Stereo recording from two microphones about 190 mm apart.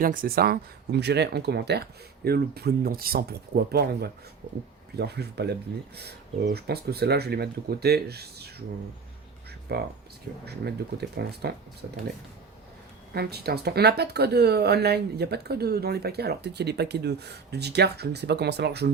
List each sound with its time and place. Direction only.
0.0 s speech: 45° right (ahead or behind)
9.7 s speech: 55° right (ahead or behind)
13.1 s speech: 55° right (ahead or behind)